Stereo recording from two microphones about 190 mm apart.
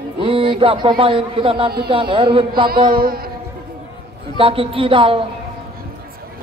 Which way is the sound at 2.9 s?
50° right (ahead or behind).